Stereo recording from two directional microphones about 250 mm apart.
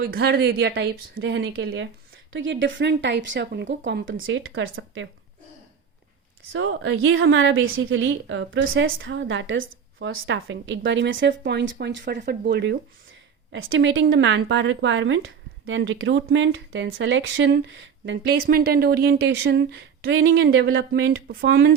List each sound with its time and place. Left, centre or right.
0.0 s speech: right
6.5 s speech: right